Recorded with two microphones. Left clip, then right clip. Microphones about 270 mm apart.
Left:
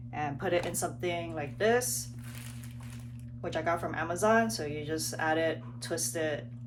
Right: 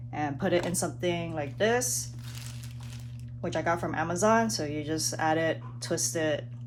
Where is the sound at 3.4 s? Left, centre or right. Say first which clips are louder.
Right 2 dB; right.